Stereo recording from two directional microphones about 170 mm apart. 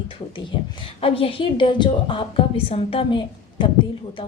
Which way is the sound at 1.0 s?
30° left (ahead or behind).